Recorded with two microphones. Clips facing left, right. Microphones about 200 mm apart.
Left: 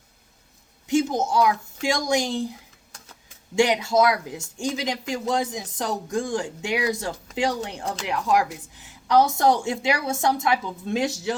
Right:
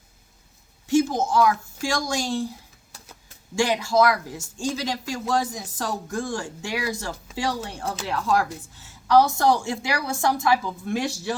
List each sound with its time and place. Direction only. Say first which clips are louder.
0.9 s a woman's voice: right 1 dB; 20° left (ahead or behind)
3.5 s speech: left 2 dB; 20° left (ahead or behind)